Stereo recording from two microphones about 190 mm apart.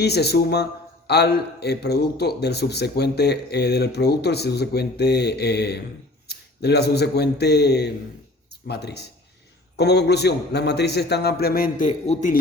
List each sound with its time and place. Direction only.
0.0 s a man's voice: 60° left (ahead or behind); by 12.4 s 45° left (ahead or behind)